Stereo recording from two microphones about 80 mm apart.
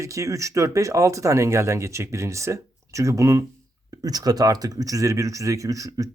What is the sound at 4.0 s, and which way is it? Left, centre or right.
Speech, right.